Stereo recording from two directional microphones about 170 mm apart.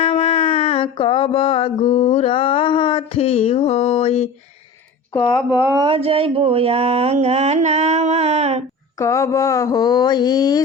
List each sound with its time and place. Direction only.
0.0 s music: 30° left (ahead or behind)
5.5 s speech: 10° right (ahead or behind)
5.8 s mantra: 30° right (ahead or behind)
9.0 s speech: 20° left (ahead or behind)